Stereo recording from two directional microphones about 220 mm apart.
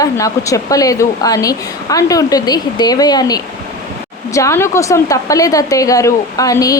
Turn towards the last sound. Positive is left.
turn(degrees=15)  # may be behind; listen again after turning